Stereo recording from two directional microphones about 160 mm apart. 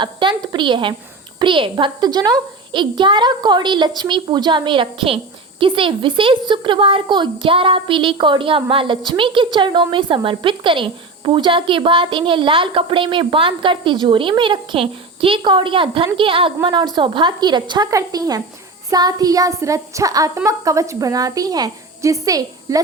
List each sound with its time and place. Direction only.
0.0 s a woman's voice: 30° right (ahead or behind)